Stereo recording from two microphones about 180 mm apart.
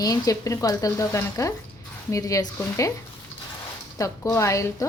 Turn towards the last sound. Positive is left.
turn(degrees=15)  # may be behind; listen again after turning